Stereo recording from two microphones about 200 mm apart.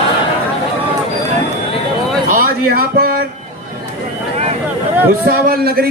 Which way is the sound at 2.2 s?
45° right (ahead or behind).